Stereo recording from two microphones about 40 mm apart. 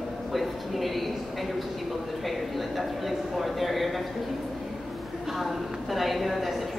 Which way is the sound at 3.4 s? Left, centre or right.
Centre.